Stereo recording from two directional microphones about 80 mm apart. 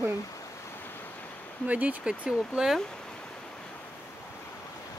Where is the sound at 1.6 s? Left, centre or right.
Centre.